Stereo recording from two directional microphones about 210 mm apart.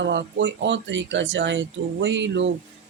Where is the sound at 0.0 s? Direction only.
55° right (ahead or behind).